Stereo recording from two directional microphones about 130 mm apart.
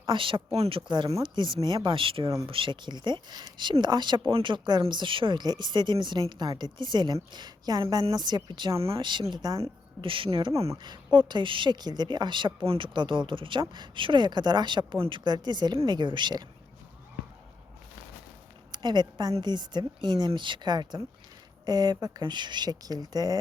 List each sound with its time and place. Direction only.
0.1 s a woman's voice: 40° right (ahead or behind)
18.7 s a woman's voice: 35° right (ahead or behind)